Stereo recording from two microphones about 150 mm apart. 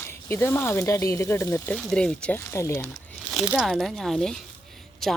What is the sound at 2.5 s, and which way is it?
Speech, 20° left (ahead or behind).